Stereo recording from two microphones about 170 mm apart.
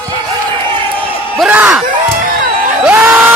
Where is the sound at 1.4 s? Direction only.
10° right (ahead or behind).